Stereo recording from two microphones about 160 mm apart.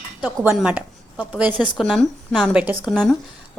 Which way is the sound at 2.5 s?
10° right (ahead or behind).